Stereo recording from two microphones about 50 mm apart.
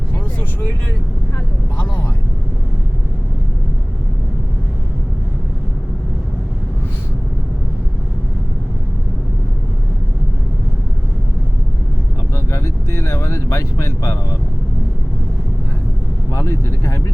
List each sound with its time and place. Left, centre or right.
12.5 s vehicle: left
16.3 s vehicle: left